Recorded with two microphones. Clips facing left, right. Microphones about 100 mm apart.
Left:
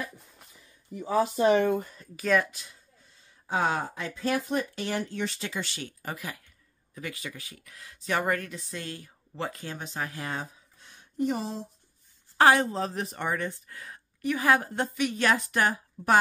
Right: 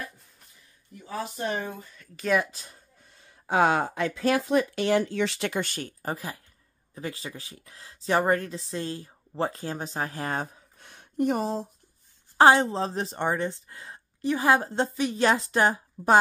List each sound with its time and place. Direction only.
1.5 s speech: 80° left
2.5 s speech: 40° right (ahead or behind)
3.1 s speech: 65° right (ahead or behind); by 11.6 s 50° right (ahead or behind)
12.4 s a woman's voice: 25° right (ahead or behind)